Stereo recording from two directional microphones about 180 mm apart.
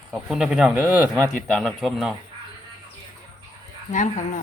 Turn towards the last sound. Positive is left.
turn(degrees=45)  # may be behind; listen again after turning